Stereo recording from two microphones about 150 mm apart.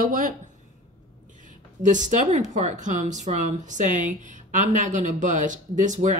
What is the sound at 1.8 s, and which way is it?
Speech, 55° right (ahead or behind).